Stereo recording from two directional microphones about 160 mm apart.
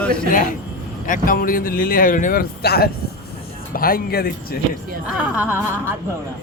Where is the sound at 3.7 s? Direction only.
65° left (ahead or behind).